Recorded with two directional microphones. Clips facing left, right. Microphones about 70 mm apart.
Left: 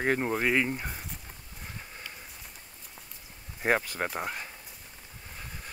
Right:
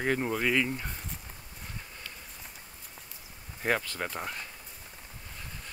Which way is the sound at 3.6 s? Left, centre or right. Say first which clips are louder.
Left 3 dB; left.